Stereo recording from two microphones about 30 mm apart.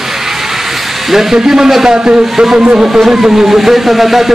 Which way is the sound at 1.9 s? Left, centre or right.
Right.